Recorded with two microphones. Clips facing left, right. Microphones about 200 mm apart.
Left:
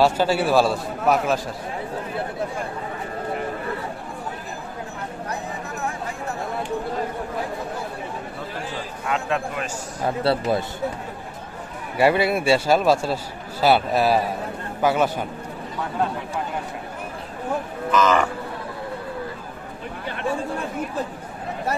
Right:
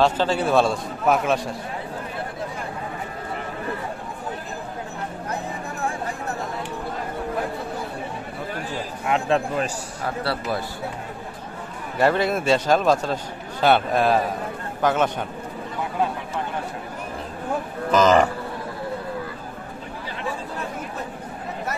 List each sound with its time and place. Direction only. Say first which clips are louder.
0.0 s a man's voice: left 1 dB; 10° left (ahead or behind)
9.0 s a man's voice: right 3 dB; 30° right (ahead or behind)
10.0 s speech: left 5 dB; 25° left (ahead or behind)
12.0 s a man's voice: left 1 dB; 10° left (ahead or behind)
17.9 s speech: right 3 dB; 35° right (ahead or behind)